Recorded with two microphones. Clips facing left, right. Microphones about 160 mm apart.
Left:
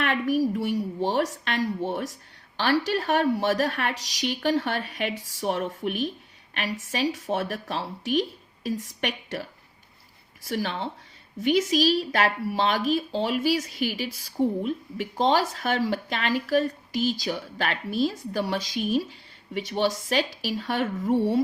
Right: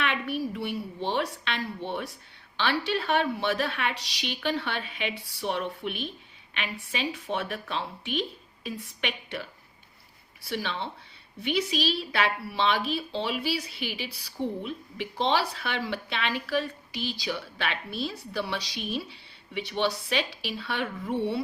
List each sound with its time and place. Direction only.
0.0 s a woman's voice: 45° left (ahead or behind)